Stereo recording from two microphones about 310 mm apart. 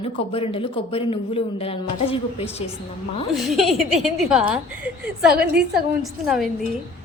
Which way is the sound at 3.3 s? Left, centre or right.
Centre.